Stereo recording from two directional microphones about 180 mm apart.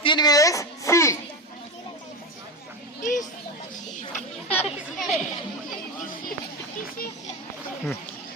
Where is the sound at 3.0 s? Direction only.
45° left (ahead or behind).